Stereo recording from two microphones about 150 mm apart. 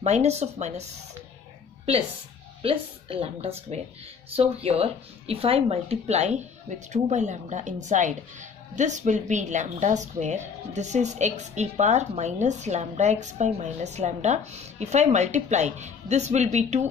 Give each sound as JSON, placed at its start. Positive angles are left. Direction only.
{"t": 0.0, "sound": "a woman's voice", "side_deg": -45}
{"t": 2.6, "sound": "a woman's voice", "side_deg": -40}